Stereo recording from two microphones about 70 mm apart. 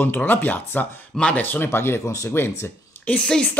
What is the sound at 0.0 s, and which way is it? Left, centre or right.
Speech, left.